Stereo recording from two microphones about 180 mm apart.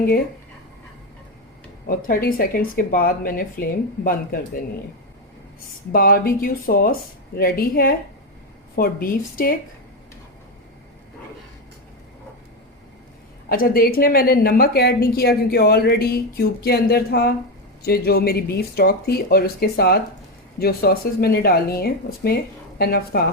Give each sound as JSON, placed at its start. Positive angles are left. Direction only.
{"t": 1.9, "sound": "speech", "side_deg": 50}
{"t": 5.9, "sound": "speech", "side_deg": 55}
{"t": 13.5, "sound": "speech", "side_deg": 55}